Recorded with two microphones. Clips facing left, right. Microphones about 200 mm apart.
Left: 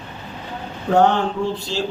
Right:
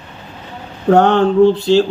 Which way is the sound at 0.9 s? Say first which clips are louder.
Right 6 dB; 65° right (ahead or behind).